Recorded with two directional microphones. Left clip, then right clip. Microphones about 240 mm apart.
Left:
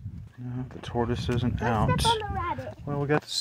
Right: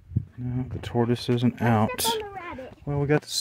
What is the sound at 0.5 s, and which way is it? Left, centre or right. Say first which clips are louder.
Speech: right 2 dB; right.